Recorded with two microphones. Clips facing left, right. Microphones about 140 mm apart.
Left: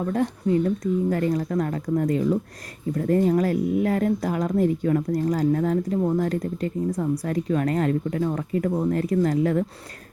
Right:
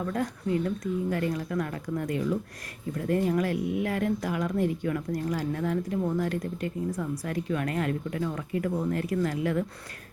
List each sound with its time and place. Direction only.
0.0 s a woman's voice: 30° left (ahead or behind)